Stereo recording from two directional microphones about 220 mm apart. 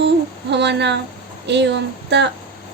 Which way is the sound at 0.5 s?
50° right (ahead or behind).